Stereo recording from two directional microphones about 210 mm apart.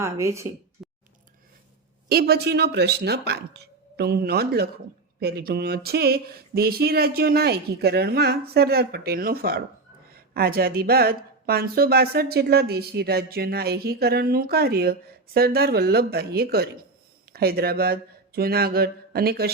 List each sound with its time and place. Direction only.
0.0 s speech: 15° right (ahead or behind)
2.0 s a woman's voice: 50° right (ahead or behind)